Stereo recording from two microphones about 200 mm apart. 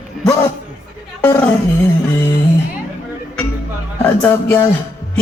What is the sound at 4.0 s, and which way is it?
Music, 10° left (ahead or behind).